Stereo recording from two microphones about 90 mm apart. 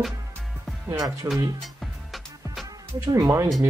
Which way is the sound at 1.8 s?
Centre (ahead or behind).